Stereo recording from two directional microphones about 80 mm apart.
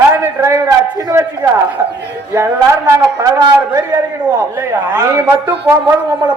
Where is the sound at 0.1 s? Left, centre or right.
Right.